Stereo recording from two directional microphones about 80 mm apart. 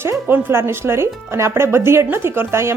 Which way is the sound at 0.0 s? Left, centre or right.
Right.